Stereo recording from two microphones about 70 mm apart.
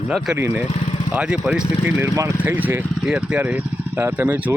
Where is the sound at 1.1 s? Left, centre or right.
Centre.